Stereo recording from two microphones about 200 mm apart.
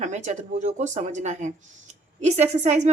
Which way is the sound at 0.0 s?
35° right (ahead or behind).